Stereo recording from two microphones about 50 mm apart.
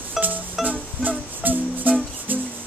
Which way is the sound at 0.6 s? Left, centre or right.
Centre.